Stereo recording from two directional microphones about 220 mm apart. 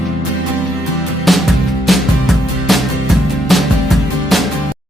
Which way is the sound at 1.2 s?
Centre (ahead or behind).